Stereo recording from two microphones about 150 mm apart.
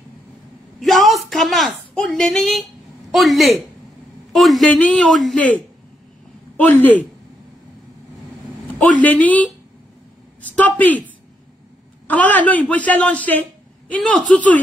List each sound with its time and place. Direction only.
0.7 s a sound: centre (ahead or behind)
3.1 s a man's voice: centre (ahead or behind)
9.0 s speech: 10° left (ahead or behind)
12.1 s speech: 10° left (ahead or behind)